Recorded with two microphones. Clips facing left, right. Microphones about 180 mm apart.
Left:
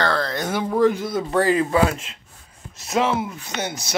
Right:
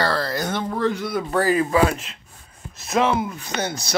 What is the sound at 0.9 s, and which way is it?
Speech, 25° left (ahead or behind).